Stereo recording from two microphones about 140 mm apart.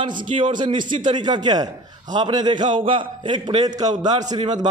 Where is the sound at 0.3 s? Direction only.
35° right (ahead or behind).